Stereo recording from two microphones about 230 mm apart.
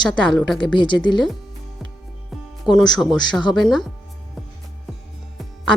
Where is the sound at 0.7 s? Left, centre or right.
Centre.